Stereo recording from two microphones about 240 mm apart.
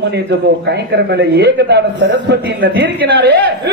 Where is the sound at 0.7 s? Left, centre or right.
Right.